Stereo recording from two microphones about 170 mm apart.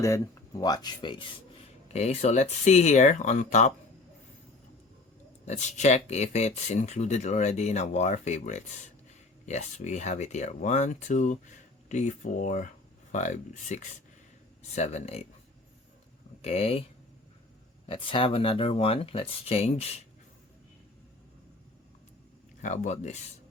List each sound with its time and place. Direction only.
0.6 s speech: 25° left (ahead or behind)
1.9 s speech: 40° left (ahead or behind)
5.5 s speech: 45° left (ahead or behind)
16.4 s speech: 35° left (ahead or behind)
17.8 s speech: 30° left (ahead or behind)
22.6 s speech: 45° left (ahead or behind)